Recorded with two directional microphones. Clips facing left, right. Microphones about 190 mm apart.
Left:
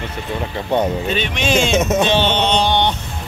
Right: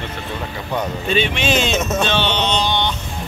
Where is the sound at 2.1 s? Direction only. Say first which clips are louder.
Left 3 dB; 50° left (ahead or behind).